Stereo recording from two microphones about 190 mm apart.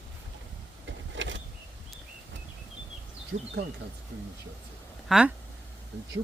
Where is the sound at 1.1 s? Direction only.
75° right (ahead or behind).